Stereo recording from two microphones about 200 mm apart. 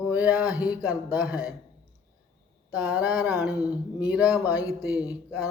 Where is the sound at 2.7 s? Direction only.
10° right (ahead or behind).